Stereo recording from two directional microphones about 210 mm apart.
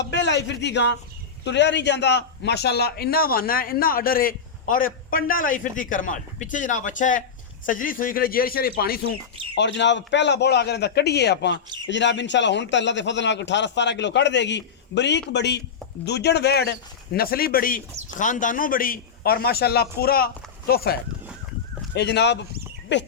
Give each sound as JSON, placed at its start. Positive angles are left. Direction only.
{"t": 0.1, "sound": "a man's voice", "side_deg": 55}
{"t": 9.6, "sound": "a man's voice", "side_deg": 55}